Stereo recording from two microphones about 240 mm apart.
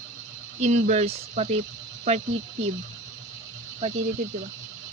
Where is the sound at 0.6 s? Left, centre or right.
Right.